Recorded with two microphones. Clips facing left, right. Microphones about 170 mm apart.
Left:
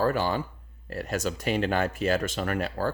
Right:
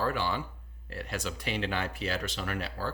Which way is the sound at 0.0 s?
45° left (ahead or behind).